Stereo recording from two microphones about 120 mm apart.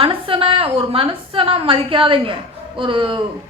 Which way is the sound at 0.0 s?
50° right (ahead or behind).